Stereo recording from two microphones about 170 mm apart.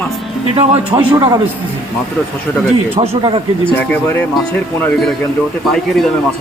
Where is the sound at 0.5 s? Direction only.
35° right (ahead or behind).